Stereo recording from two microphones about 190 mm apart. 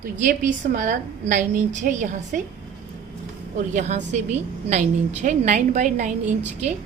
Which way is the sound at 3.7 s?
40° right (ahead or behind).